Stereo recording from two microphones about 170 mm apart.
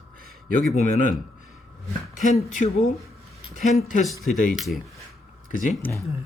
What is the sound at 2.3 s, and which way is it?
Speech, 40° left (ahead or behind).